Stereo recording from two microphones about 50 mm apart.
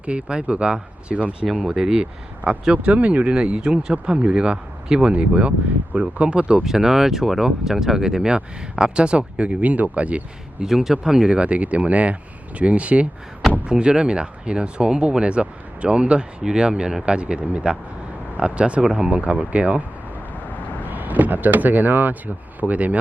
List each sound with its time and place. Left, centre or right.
0.0 s speech: right
1.6 s speech: centre
2.7 s speech: right
5.1 s speech: right
6.7 s speech: centre; by 10.2 s right
10.6 s speech: centre
11.3 s speech: right
20.8 s speech: right